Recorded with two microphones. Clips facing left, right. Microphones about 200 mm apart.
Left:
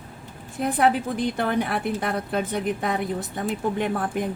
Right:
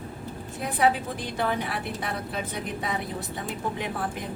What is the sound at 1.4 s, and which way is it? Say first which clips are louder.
A woman's voice: even; 50° left (ahead or behind).